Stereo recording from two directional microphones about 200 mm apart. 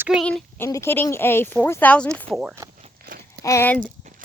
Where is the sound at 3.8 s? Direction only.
40° right (ahead or behind).